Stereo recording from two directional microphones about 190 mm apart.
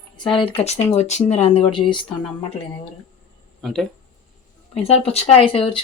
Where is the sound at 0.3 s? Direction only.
30° left (ahead or behind).